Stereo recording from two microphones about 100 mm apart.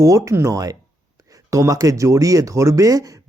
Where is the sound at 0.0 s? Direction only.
30° right (ahead or behind).